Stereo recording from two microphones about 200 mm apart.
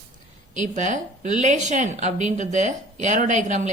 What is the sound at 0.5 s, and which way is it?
Speech, 40° right (ahead or behind).